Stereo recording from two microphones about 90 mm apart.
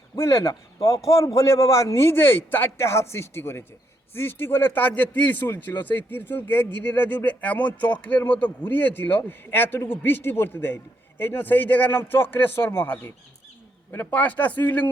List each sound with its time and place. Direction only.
0.2 s a man's voice: 30° left (ahead or behind)